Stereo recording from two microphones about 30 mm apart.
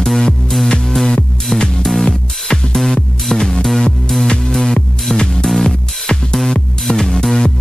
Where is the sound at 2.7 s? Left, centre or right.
Centre.